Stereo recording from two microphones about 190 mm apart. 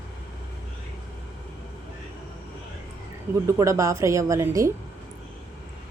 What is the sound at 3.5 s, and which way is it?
A woman's voice, 15° right (ahead or behind).